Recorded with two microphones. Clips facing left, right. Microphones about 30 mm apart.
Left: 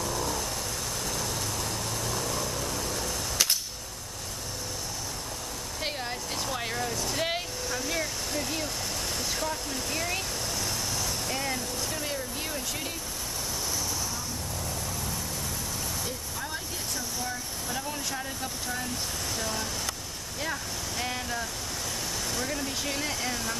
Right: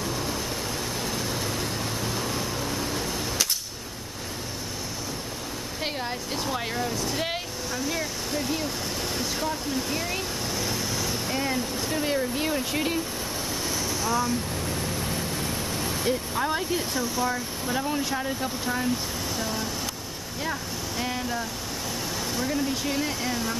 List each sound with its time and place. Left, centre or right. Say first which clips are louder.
0.0 s vehicle: right 1 dB; right
5.8 s speech: right 2 dB; centre; by 13.0 s right
15.8 s speech: right 8 dB; right; by 19.7 s centre
21.0 s speech: right 3 dB; centre